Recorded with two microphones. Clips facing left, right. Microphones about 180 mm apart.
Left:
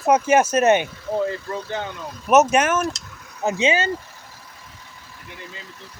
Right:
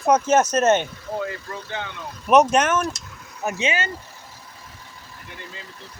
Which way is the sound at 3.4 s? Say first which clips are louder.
Left 4 dB; 25° left (ahead or behind).